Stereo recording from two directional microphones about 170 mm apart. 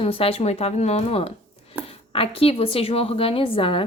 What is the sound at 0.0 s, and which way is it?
A woman's voice, 35° left (ahead or behind).